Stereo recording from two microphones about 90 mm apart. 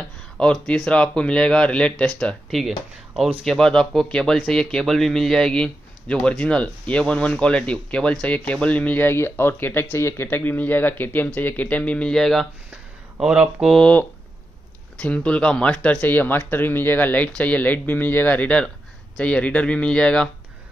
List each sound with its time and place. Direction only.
0.4 s speech: 10° left (ahead or behind)
13.2 s speech: 5° right (ahead or behind)
13.7 s speech: 15° left (ahead or behind)